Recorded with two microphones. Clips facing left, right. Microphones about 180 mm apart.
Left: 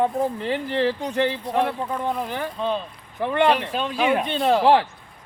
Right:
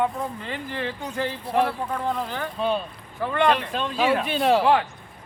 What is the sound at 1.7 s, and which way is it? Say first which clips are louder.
Speech: left 1 dB; 20° left (ahead or behind).